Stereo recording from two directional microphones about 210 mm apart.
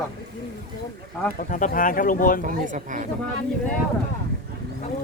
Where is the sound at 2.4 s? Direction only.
35° right (ahead or behind).